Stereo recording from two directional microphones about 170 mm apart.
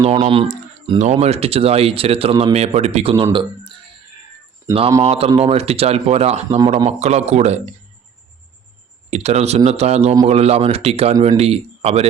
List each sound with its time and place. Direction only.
0.0 s speech: 35° right (ahead or behind); by 4.8 s 20° right (ahead or behind)
5.0 s speech: 35° right (ahead or behind)
9.0 s speech: 40° right (ahead or behind)